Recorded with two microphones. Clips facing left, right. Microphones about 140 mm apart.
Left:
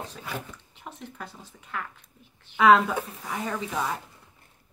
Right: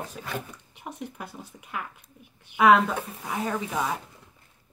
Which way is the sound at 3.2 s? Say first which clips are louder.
Right 2 dB; 10° right (ahead or behind).